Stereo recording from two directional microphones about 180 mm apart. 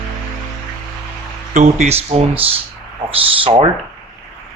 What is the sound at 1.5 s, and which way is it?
Speech, 40° right (ahead or behind).